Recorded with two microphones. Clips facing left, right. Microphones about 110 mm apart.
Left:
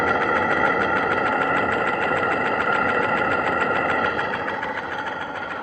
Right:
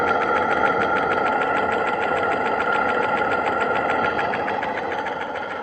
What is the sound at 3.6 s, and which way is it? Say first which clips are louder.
Sewing machine: right 1 dB; 20° right (ahead or behind).